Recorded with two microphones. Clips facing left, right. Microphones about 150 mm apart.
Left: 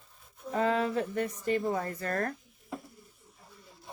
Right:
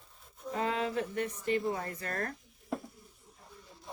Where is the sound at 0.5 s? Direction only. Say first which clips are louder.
Left 4 dB; 40° left (ahead or behind).